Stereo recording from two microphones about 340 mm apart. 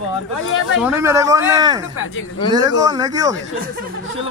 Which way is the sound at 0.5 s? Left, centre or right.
Left.